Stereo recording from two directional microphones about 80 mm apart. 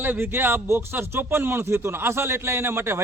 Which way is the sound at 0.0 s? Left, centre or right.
Right.